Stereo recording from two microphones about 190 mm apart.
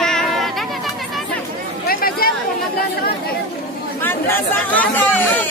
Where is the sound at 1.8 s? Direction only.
50° left (ahead or behind).